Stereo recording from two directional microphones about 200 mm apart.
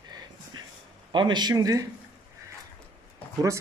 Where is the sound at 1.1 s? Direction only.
20° right (ahead or behind).